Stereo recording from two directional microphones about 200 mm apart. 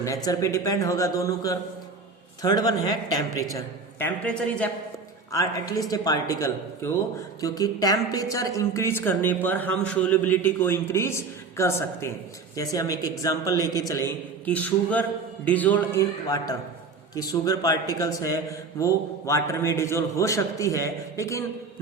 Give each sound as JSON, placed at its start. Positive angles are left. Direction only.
{"t": 0.0, "sound": "speech", "side_deg": 15}